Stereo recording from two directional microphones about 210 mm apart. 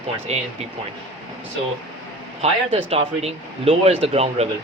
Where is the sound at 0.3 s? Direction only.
30° right (ahead or behind).